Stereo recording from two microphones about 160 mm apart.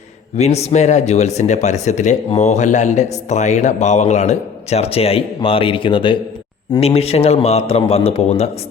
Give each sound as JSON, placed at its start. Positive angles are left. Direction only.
{"t": 0.3, "sound": "a man's voice", "side_deg": 45}